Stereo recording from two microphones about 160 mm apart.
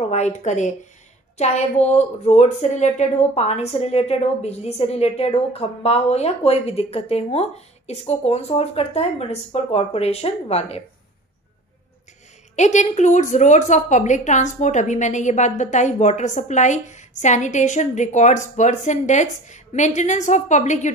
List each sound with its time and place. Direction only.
0.0 s a woman's voice: 45° left (ahead or behind)
12.5 s a woman's voice: 45° left (ahead or behind)